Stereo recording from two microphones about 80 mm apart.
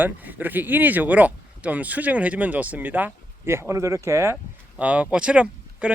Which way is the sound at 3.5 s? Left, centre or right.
Right.